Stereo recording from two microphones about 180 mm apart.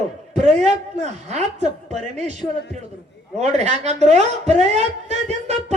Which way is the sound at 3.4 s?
40° right (ahead or behind).